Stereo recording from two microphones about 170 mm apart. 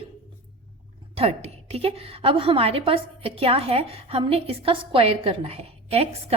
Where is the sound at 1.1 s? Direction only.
35° right (ahead or behind).